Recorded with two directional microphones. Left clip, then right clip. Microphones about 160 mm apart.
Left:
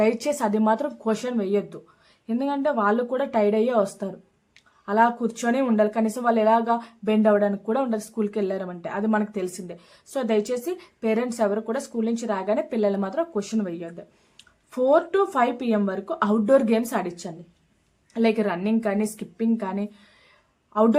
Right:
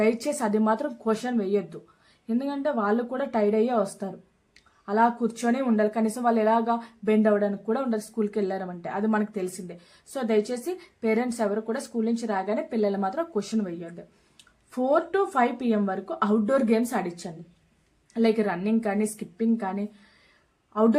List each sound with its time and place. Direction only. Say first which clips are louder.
0.0 s speech: left 3 dB; 25° left (ahead or behind)